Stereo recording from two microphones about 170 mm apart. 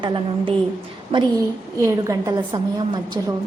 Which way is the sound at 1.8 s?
20° right (ahead or behind).